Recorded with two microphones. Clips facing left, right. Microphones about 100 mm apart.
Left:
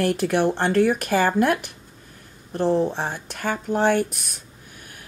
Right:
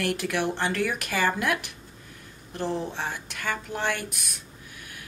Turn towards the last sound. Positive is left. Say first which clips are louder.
# left 10 dB
turn(degrees=40)  # may be behind; listen again after turning